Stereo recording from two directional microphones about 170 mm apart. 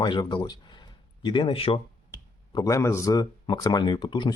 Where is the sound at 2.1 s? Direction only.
20° left (ahead or behind).